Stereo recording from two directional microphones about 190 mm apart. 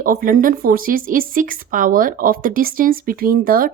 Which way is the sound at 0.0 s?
45° right (ahead or behind).